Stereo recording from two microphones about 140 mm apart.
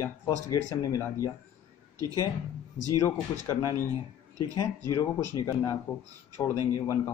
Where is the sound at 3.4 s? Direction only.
20° left (ahead or behind).